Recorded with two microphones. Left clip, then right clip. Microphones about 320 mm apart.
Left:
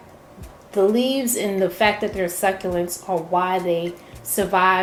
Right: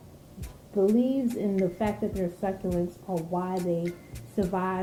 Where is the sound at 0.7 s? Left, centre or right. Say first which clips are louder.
Left 6 dB; centre.